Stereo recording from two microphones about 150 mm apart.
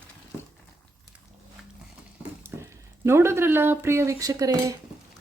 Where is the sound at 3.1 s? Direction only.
15° right (ahead or behind).